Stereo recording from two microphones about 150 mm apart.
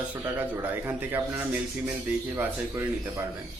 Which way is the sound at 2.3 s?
20° right (ahead or behind).